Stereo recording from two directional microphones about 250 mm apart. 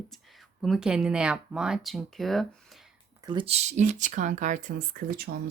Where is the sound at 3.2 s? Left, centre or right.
Right.